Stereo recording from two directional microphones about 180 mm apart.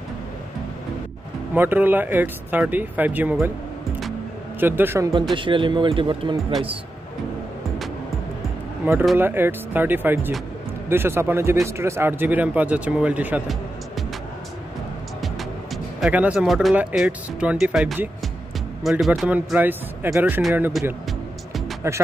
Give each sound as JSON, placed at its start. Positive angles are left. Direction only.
{"t": 1.5, "sound": "speech", "side_deg": -10}
{"t": 4.6, "sound": "speech", "side_deg": -10}
{"t": 5.3, "sound": "speech", "side_deg": -25}
{"t": 8.8, "sound": "speech", "side_deg": -10}
{"t": 15.2, "sound": "speech", "side_deg": 0}
{"t": 20.8, "sound": "speech", "side_deg": 0}
{"t": 21.8, "sound": "speech", "side_deg": -15}